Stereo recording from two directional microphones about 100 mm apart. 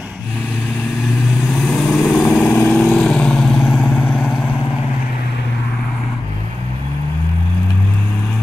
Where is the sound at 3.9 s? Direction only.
20° left (ahead or behind).